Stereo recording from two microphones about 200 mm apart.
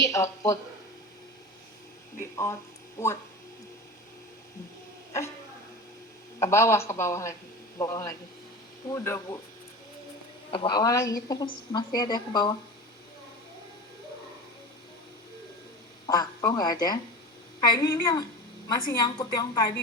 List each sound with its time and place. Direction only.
0.0 s a woman's voice: 15° left (ahead or behind)
2.3 s speech: 15° left (ahead or behind)
6.4 s a woman's voice: 15° left (ahead or behind)
10.5 s a woman's voice: 20° left (ahead or behind)
16.0 s a woman's voice: 20° left (ahead or behind)